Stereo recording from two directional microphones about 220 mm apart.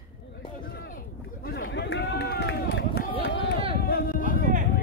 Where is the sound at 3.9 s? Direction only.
40° left (ahead or behind).